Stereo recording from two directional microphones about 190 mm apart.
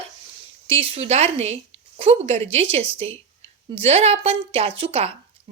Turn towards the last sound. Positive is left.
turn(degrees=-30)  # may be behind; listen again after turning